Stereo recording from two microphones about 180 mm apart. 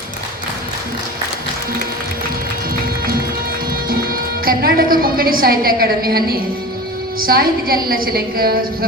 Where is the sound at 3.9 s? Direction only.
55° right (ahead or behind).